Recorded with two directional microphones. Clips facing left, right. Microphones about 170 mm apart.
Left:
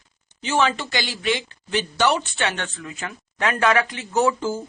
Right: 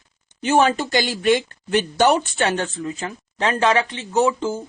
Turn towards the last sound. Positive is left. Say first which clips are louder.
# right 2 dB
turn(degrees=-20)  # may be behind; listen again after turning